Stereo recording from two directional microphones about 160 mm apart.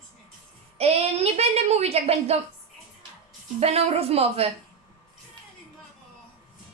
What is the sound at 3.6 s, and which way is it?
Speech, 40° right (ahead or behind).